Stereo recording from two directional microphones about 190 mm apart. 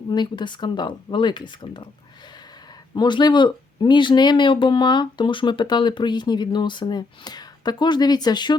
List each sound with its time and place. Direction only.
0.1 s speech: 25° left (ahead or behind)
2.9 s speech: 25° left (ahead or behind)